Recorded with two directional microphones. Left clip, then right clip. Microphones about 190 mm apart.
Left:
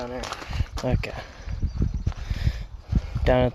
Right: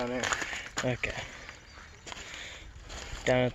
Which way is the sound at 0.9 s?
30° left (ahead or behind).